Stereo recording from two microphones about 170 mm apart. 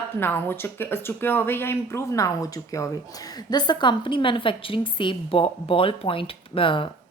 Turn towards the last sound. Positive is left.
turn(degrees=30)  # may be behind; listen again after turning